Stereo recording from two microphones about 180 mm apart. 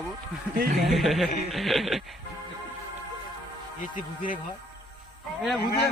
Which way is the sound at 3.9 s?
50° left (ahead or behind).